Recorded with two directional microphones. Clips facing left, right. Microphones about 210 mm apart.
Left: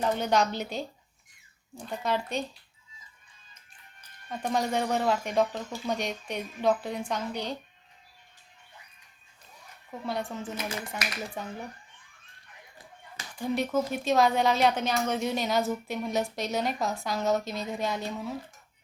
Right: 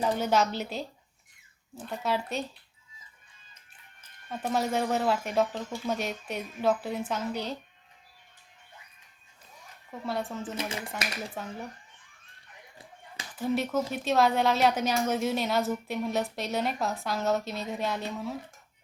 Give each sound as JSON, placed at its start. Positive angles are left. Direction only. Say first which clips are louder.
{"t": 0.0, "sound": "a woman's voice", "louder": "even", "side_deg": -5}
{"t": 4.3, "sound": "a woman's voice", "louder": "even", "side_deg": -5}
{"t": 10.1, "sound": "a woman's voice", "louder": "even", "side_deg": 0}
{"t": 10.6, "sound": "speech", "louder": "even", "side_deg": -30}
{"t": 11.4, "sound": "a woman's voice", "louder": "left 1 dB", "side_deg": 0}
{"t": 13.3, "sound": "a woman's voice", "louder": "even", "side_deg": -5}